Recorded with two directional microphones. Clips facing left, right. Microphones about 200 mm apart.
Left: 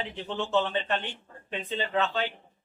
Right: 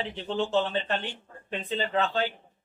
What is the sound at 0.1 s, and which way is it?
A man's voice, 35° right (ahead or behind).